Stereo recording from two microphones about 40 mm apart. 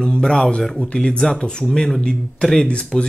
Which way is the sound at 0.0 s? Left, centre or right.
Centre.